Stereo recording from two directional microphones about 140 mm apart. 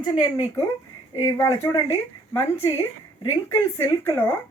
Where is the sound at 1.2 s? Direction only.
20° left (ahead or behind).